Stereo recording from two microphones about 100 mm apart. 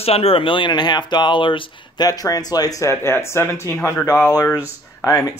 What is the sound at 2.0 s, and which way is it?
Speech, 40° left (ahead or behind).